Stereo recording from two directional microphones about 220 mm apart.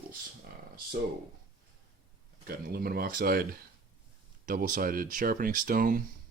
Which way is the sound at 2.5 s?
45° right (ahead or behind).